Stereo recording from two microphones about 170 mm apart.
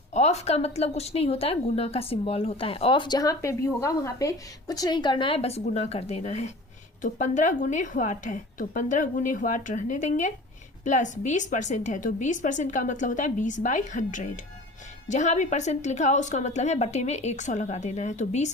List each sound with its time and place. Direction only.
0.1 s a woman's voice: 40° left (ahead or behind)